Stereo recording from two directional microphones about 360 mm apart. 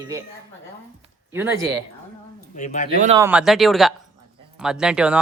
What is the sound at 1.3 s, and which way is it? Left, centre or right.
Speech, centre.